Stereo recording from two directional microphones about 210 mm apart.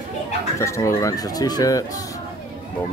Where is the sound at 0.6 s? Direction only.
15° left (ahead or behind).